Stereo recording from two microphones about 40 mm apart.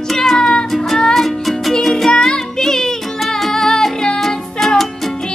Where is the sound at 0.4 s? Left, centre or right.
Left.